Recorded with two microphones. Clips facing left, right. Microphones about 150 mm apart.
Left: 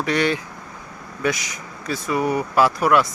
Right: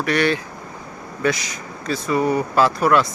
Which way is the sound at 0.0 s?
20° left (ahead or behind).